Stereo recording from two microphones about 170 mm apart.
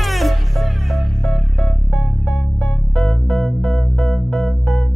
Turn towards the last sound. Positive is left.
turn(degrees=0)  # may be behind; listen again after turning